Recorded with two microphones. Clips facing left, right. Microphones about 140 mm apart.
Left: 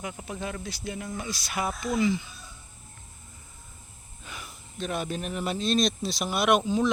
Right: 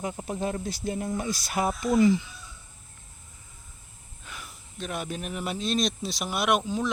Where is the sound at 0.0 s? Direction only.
35° right (ahead or behind).